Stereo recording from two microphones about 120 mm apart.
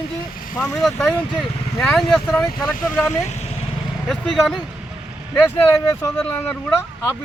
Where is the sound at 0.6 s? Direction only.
5° left (ahead or behind).